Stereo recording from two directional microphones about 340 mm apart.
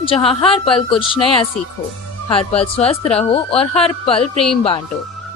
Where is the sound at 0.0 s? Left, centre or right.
Centre.